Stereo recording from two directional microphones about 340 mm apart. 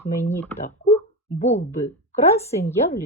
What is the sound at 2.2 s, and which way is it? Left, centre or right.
Speech, centre.